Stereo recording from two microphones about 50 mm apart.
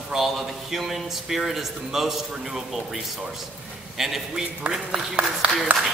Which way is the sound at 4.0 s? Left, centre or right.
Centre.